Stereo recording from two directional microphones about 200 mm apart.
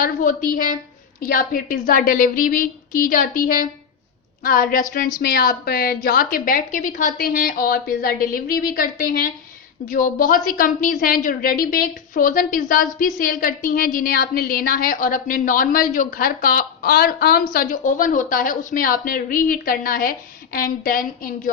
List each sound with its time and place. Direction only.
0.0 s a woman's voice: 40° left (ahead or behind)